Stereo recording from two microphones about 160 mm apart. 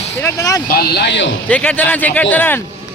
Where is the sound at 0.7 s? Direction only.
80° left.